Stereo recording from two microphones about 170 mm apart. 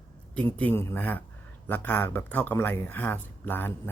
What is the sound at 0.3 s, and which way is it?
Speech, 10° left (ahead or behind).